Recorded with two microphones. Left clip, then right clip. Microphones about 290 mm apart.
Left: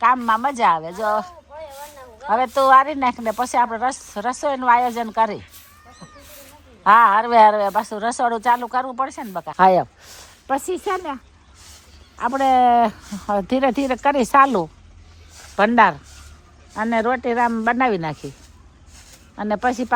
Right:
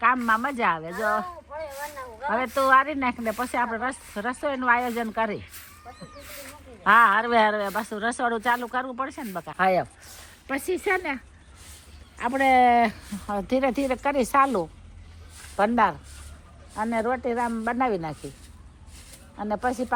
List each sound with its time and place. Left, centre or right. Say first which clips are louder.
0.0 s a woman's voice: left 5 dB; centre
6.8 s a woman's voice: left 5 dB; centre
9.6 s speech: left 8 dB; left
10.4 s a woman's voice: left 4 dB; centre
19.4 s speech: left 6 dB; left